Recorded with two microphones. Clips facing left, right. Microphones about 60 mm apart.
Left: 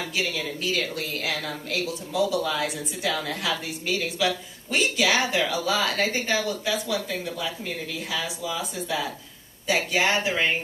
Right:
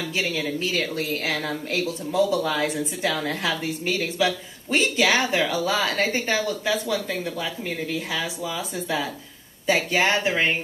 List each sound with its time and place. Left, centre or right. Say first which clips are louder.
0.1 s speech: right 3 dB; right